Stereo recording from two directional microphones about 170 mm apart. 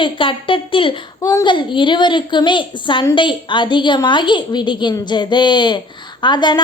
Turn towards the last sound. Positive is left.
turn(degrees=25)  # may be behind; listen again after turning